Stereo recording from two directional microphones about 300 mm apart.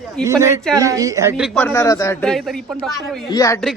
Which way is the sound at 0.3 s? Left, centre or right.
Centre.